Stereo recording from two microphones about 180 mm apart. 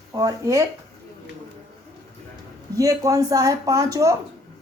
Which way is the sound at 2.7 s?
20° right (ahead or behind).